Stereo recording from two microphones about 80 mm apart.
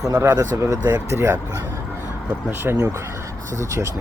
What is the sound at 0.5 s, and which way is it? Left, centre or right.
Speech, right.